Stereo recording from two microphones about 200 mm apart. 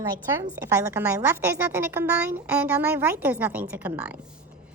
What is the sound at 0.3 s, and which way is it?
A woman's voice, 15° right (ahead or behind).